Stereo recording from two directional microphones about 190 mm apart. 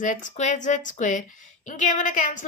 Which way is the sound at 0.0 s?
40° left (ahead or behind).